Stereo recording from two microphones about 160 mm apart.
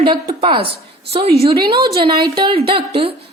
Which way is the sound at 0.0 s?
30° right (ahead or behind).